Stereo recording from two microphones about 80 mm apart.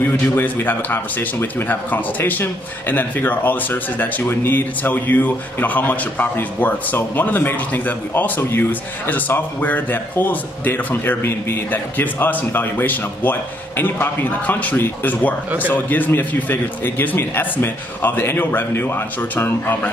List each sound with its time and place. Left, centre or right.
0.4 s speech: left